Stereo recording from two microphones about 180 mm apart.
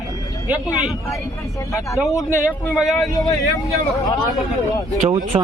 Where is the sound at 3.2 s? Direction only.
20° left (ahead or behind).